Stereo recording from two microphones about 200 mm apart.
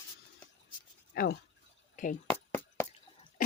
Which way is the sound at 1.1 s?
45° left (ahead or behind).